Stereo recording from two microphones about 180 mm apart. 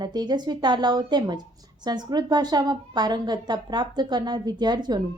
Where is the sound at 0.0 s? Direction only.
25° right (ahead or behind).